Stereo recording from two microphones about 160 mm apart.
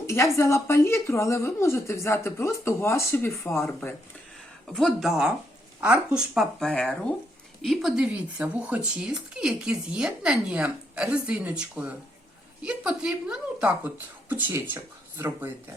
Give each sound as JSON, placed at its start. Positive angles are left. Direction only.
{"t": 0.3, "sound": "a woman's voice", "side_deg": 15}
{"t": 4.7, "sound": "speech", "side_deg": 0}